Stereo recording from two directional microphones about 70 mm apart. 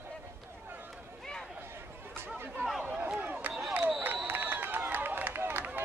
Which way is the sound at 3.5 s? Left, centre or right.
Centre.